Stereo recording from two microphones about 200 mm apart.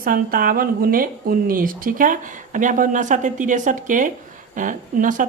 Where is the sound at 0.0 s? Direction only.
45° right (ahead or behind).